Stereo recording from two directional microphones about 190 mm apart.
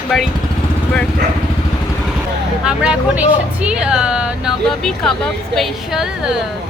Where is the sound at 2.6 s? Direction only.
5° right (ahead or behind).